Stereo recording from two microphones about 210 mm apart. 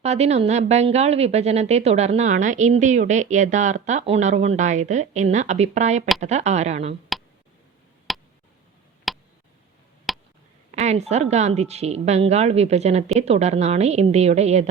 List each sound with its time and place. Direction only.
0.0 s a woman's voice: 30° right (ahead or behind)
8.1 s tick: centre (ahead or behind)
9.1 s a sound: centre (ahead or behind)
10.7 s a woman's voice: 30° right (ahead or behind)